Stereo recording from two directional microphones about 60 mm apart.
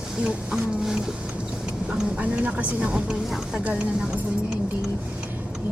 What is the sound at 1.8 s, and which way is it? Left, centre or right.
A woman's voice, right.